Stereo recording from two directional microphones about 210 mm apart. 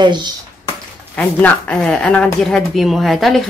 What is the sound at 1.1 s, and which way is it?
Speech, 5° left (ahead or behind).